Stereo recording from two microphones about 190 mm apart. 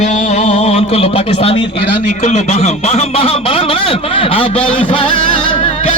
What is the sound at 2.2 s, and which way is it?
Speech, 40° left (ahead or behind).